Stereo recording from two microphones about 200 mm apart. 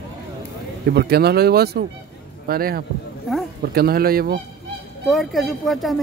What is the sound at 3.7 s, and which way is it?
Speech, 50° right (ahead or behind).